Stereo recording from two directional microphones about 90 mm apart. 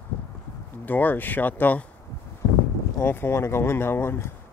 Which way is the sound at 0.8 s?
20° left (ahead or behind).